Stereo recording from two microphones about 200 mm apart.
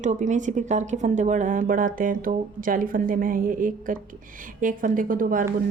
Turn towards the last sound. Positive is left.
turn(degrees=-45)  # may be behind; listen again after turning